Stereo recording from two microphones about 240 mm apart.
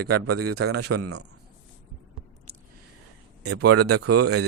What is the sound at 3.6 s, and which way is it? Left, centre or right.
Speech, right.